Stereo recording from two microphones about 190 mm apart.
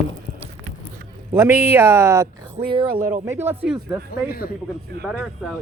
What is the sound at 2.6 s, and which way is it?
Speech, 25° right (ahead or behind).